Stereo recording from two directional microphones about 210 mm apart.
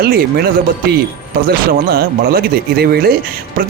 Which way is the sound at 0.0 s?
45° right (ahead or behind).